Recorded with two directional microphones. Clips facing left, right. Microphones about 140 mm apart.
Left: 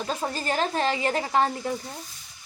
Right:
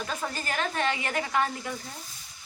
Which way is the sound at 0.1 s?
30° left (ahead or behind).